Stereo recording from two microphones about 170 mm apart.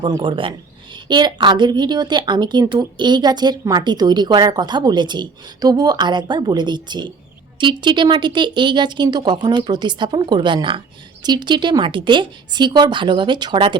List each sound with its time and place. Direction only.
0.0 s speech: 30° right (ahead or behind)